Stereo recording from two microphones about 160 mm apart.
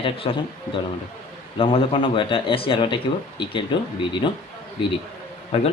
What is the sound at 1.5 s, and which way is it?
Speech, 35° left (ahead or behind).